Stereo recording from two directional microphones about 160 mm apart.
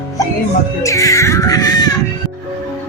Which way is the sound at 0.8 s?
20° left (ahead or behind).